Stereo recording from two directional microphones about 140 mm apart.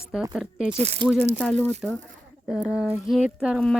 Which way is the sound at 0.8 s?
50° right (ahead or behind).